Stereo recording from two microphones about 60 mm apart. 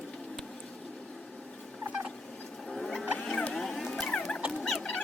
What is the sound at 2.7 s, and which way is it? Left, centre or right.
Rodents, centre.